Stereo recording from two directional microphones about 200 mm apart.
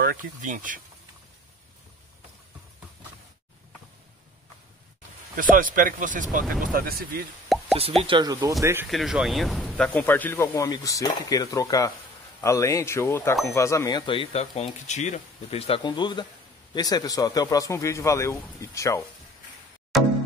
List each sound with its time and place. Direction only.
0.0 s speech: 45° right (ahead or behind)
5.3 s speech: 40° right (ahead or behind)
7.5 s plop: centre (ahead or behind)
8.0 s speech: 20° right (ahead or behind)
8.8 s speech: centre (ahead or behind); by 18.9 s 15° left (ahead or behind)
19.9 s music: centre (ahead or behind)